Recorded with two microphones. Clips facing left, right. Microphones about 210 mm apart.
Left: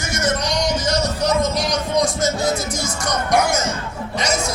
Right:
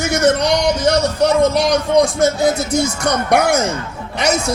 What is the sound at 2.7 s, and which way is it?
Speech, 60° right (ahead or behind).